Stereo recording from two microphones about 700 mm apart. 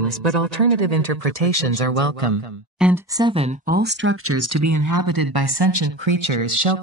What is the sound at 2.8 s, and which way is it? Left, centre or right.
Speech, centre.